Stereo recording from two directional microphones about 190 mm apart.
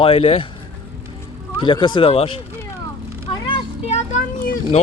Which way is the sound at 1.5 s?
25° left (ahead or behind).